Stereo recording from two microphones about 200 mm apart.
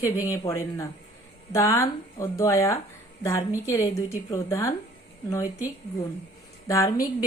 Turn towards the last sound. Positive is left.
turn(degrees=15)  # may be behind; listen again after turning